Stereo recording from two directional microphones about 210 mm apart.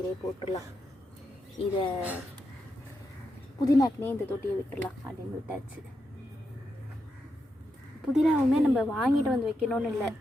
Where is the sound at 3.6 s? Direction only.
15° left (ahead or behind).